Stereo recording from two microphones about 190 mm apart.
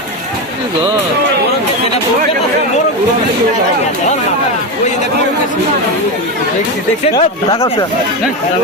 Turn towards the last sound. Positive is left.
turn(degrees=30)  # may be behind; listen again after turning